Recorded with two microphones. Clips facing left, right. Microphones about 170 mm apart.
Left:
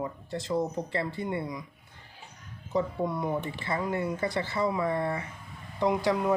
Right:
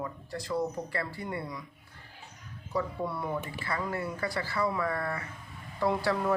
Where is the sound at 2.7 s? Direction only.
20° left (ahead or behind).